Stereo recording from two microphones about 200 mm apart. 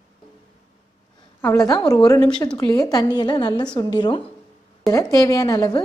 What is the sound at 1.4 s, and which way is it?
A woman's voice, 15° left (ahead or behind).